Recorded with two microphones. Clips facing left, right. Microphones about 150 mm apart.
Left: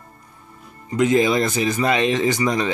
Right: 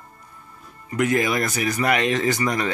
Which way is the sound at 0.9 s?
20° left (ahead or behind).